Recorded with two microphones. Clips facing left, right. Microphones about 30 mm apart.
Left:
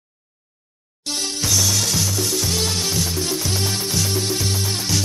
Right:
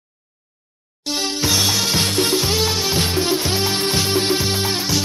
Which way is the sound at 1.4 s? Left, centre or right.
Right.